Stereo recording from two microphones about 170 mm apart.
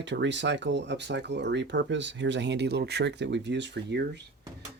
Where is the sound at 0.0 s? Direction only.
90° right.